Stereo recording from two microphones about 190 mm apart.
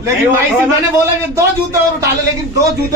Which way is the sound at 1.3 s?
15° right (ahead or behind).